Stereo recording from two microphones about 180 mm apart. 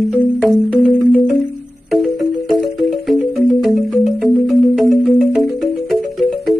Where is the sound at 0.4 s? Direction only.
5° right (ahead or behind).